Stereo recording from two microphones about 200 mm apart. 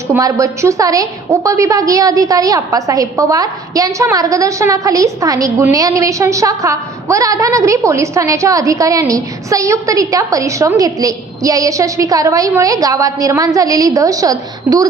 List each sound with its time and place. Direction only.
0.1 s a woman's voice: 15° right (ahead or behind)